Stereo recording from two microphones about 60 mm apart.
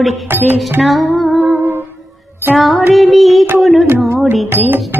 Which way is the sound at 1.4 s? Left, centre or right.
Right.